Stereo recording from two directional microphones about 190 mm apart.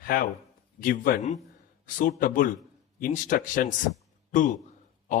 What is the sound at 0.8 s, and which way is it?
A man's voice, 50° left (ahead or behind).